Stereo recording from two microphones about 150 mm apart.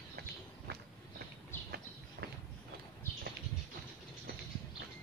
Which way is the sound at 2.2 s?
90° right.